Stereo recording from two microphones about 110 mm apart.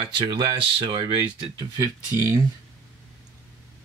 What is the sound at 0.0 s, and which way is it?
Speech, 45° right (ahead or behind).